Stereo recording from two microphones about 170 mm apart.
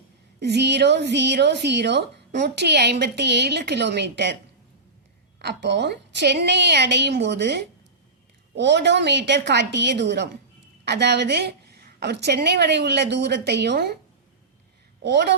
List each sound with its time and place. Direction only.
0.3 s a woman's voice: 75° right (ahead or behind)
5.4 s a woman's voice: 85° right
10.8 s a woman's voice: 75° right (ahead or behind)
15.0 s a woman's voice: 90° right